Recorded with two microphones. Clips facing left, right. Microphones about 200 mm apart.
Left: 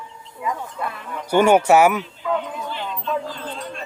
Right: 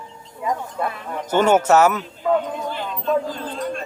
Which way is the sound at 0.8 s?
40° right (ahead or behind).